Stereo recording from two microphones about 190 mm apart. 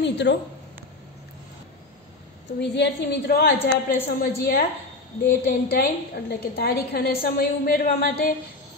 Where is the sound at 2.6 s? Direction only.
60° left (ahead or behind).